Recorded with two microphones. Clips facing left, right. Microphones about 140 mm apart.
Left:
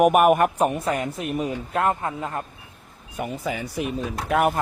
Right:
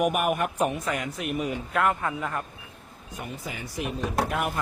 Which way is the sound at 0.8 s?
35° left (ahead or behind).